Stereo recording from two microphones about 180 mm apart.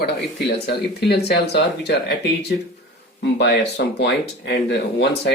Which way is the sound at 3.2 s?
70° left (ahead or behind).